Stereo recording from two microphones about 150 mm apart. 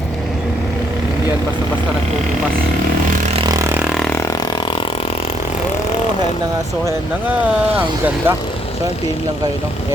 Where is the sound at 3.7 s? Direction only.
Centre (ahead or behind).